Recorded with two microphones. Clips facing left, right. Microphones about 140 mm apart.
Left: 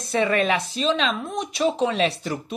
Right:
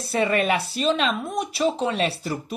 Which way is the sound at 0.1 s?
5° right (ahead or behind).